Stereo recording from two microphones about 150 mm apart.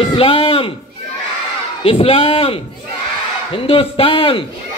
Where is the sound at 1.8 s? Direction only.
40° left (ahead or behind).